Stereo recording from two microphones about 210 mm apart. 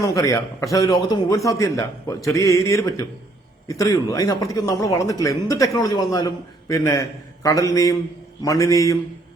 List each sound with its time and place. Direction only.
0.0 s speech: 15° left (ahead or behind)